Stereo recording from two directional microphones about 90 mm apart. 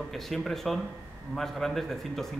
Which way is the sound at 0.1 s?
Centre (ahead or behind).